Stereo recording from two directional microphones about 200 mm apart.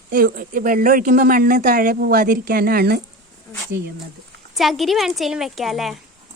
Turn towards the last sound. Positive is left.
turn(degrees=0)  # may be behind; listen again after turning